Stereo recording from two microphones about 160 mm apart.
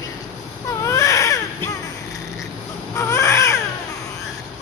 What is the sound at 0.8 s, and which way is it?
Baby cry, 20° left (ahead or behind).